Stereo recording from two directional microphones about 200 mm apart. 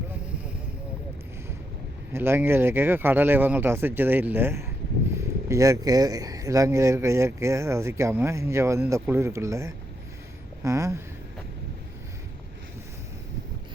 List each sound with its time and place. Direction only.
2.1 s speech: 10° right (ahead or behind)